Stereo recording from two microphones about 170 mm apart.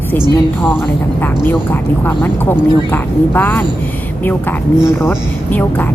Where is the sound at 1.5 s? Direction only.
10° left (ahead or behind).